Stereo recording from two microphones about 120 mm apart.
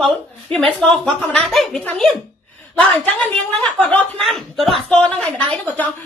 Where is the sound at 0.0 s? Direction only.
Centre (ahead or behind).